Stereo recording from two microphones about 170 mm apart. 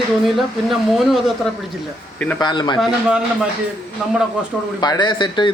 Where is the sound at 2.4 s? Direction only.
25° left (ahead or behind).